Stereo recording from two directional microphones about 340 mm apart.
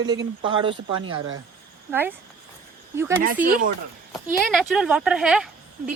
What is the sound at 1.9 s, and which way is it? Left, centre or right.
Speech, centre.